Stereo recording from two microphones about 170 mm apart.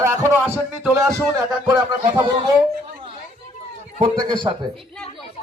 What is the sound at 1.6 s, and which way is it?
Speech, 25° right (ahead or behind).